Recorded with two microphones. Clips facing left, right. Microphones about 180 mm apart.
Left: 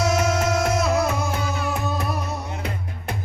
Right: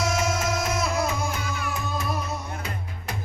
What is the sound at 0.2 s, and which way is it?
Music, 65° left (ahead or behind).